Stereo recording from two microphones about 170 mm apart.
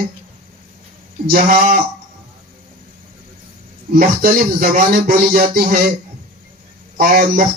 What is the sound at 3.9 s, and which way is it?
A man's voice, 55° right (ahead or behind).